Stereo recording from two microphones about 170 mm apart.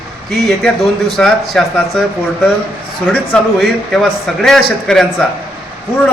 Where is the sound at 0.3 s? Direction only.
Centre (ahead or behind).